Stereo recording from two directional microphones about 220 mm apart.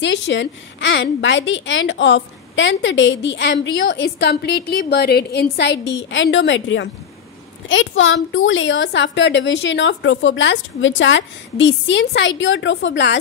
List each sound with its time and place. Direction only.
0.0 s a woman's voice: 55° left (ahead or behind)